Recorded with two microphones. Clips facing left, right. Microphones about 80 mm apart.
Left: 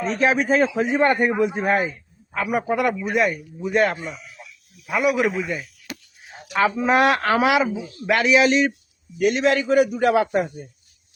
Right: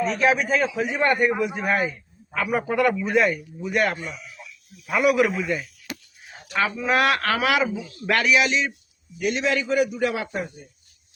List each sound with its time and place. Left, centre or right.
0.3 s speech: left
0.9 s speech: left
2.3 s a man's voice: centre
3.6 s speech: left
4.9 s a man's voice: centre
6.6 s speech: left
8.4 s a man's voice: left